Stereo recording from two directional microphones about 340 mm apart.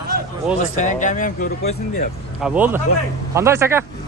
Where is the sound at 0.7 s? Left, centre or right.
Left.